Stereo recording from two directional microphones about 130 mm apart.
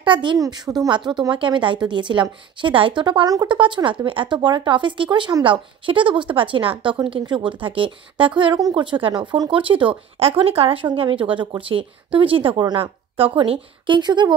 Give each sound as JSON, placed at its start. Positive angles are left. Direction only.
{"t": 0.0, "sound": "speech", "side_deg": -40}